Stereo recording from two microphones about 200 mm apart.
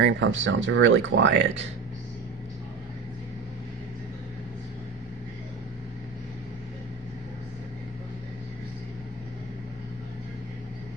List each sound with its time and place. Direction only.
0.0 s speech: 65° right (ahead or behind)